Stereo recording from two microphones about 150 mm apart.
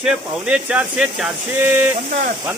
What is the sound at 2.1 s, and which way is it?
Speech, 55° right (ahead or behind).